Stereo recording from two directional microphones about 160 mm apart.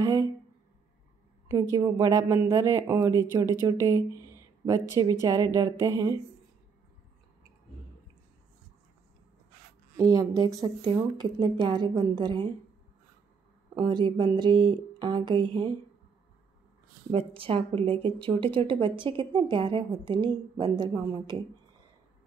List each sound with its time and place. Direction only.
1.5 s a woman's voice: 15° right (ahead or behind)
9.9 s a woman's voice: 20° right (ahead or behind)
13.7 s a woman's voice: 30° right (ahead or behind)
17.1 s speech: 35° right (ahead or behind)